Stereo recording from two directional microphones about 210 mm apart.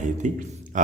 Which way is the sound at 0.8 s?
40° right (ahead or behind).